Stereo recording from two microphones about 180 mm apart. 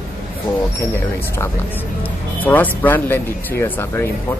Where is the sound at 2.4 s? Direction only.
10° left (ahead or behind).